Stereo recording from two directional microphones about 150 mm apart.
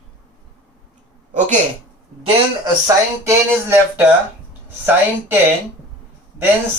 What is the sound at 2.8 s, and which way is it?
Speech, 20° right (ahead or behind).